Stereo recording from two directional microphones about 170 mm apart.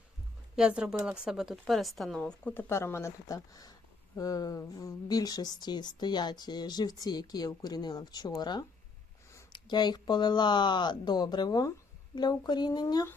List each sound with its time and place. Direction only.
0.5 s speech: 5° right (ahead or behind); by 13.1 s 20° left (ahead or behind)